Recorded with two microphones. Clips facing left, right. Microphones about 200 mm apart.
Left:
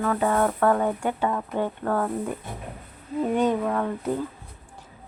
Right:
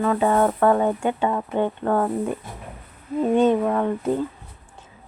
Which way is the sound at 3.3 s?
25° right (ahead or behind).